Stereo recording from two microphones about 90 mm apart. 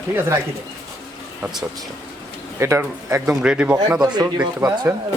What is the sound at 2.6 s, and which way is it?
Speech, 35° right (ahead or behind).